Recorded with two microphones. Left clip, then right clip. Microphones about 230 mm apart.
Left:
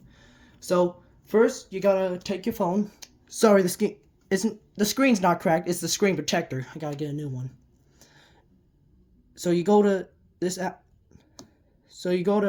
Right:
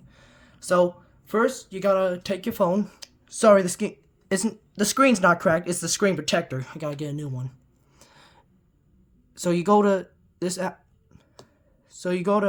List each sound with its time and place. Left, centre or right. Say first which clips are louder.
0.1 s speech: right 2 dB; centre
3.2 s speech: right 3 dB; centre
7.9 s a sound: right 3 dB; right
11.9 s speech: right 1 dB; centre